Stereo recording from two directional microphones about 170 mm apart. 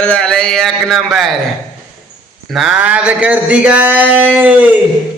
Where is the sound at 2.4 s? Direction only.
5° right (ahead or behind).